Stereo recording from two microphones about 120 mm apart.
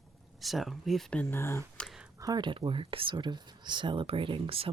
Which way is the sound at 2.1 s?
30° right (ahead or behind).